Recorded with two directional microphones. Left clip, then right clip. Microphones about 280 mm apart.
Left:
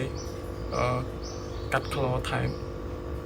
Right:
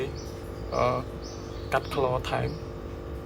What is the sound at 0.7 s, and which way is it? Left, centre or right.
A man's voice, centre.